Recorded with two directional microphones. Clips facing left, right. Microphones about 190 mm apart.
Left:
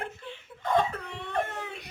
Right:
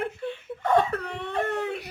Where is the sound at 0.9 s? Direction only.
70° right (ahead or behind).